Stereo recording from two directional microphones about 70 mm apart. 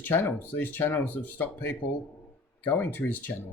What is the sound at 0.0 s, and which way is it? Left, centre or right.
Speech, left.